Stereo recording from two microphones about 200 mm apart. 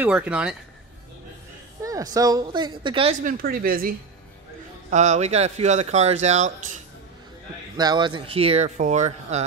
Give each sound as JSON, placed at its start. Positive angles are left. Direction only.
{"t": 0.0, "sound": "speech", "side_deg": -5}
{"t": 1.8, "sound": "speech", "side_deg": -15}
{"t": 3.3, "sound": "a woman's voice", "side_deg": -50}
{"t": 4.9, "sound": "speech", "side_deg": -35}
{"t": 7.7, "sound": "speech", "side_deg": -20}